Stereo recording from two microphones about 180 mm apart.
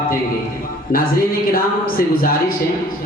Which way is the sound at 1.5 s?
55° left (ahead or behind).